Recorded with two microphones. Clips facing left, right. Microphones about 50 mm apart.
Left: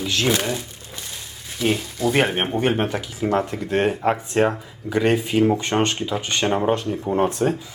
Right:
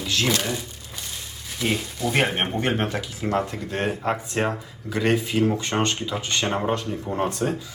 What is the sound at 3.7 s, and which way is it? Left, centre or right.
Speech, left.